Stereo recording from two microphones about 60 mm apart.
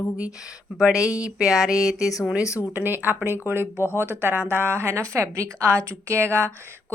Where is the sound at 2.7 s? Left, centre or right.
Right.